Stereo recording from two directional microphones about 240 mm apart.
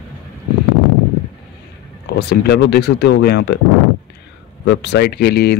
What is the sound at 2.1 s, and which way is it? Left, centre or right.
Speech, left.